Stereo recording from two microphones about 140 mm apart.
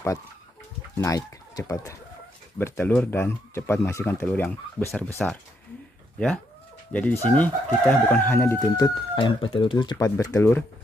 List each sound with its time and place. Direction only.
0.9 s speech: 25° left (ahead or behind)
2.9 s chicken: 10° left (ahead or behind)
5.2 s speech: 5° left (ahead or behind)
6.9 s chicken: 10° left (ahead or behind); by 10.0 s 35° left (ahead or behind)
10.0 s speech: 20° left (ahead or behind)